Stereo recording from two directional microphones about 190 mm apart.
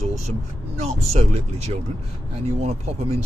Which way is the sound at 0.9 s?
35° right (ahead or behind).